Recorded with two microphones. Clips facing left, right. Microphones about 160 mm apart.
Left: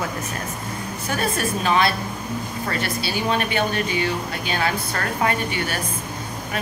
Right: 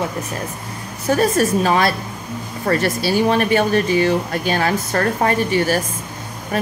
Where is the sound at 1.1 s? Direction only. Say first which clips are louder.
Right 9 dB; 40° right (ahead or behind).